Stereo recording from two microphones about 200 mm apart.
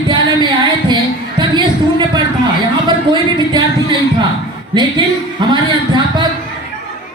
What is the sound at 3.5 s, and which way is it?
Speech, 20° right (ahead or behind).